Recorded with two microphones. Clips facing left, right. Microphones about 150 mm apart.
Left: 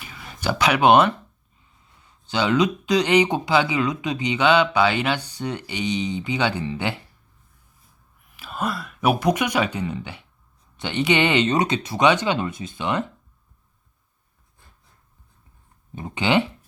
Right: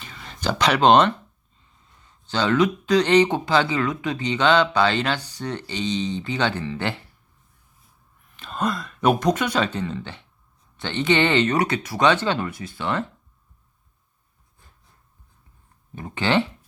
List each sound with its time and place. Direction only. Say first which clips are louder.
0.0 s a sound: even; 10° left (ahead or behind)
2.0 s speech: even; 10° left (ahead or behind)
8.4 s speech: right 2 dB; 5° left (ahead or behind)
16.0 s speech: left 1 dB; 20° left (ahead or behind)